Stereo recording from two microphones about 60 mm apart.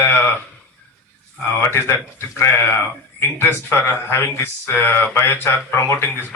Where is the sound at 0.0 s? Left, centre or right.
Left.